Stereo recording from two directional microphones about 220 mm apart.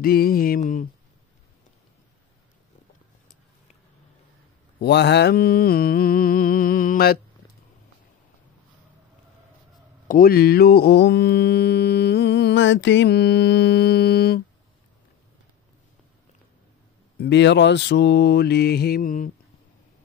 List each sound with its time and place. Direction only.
0.0 s a sound: 45° left (ahead or behind)
4.7 s mantra: 50° left (ahead or behind)
10.0 s mantra: 40° left (ahead or behind)
17.2 s mantra: 50° left (ahead or behind)